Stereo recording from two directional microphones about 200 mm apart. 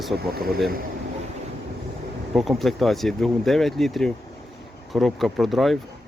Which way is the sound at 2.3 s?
Centre (ahead or behind).